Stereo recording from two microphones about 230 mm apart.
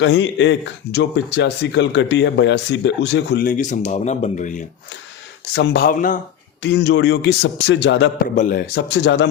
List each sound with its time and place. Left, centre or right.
0.0 s speech: left
5.5 s speech: left
6.6 s speech: left
8.4 s speech: left